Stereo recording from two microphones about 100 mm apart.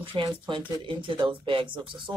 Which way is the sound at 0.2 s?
55° right (ahead or behind).